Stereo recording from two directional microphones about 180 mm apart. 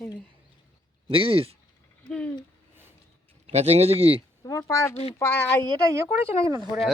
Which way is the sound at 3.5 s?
35° right (ahead or behind).